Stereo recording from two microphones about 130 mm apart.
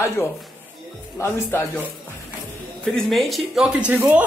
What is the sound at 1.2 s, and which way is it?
Speech, 20° left (ahead or behind).